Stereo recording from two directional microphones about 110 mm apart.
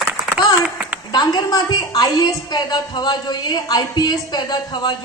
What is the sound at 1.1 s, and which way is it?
A woman's voice, 40° left (ahead or behind).